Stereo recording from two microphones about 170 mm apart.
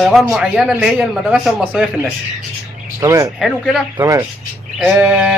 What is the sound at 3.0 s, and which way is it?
Speech, 20° right (ahead or behind).